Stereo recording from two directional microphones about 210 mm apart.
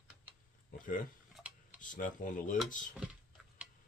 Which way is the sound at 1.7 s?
40° left (ahead or behind).